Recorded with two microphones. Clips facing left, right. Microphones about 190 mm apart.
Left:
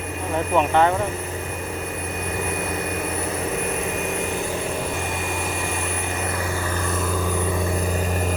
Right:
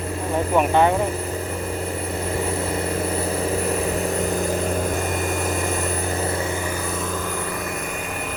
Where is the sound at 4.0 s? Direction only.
35° right (ahead or behind).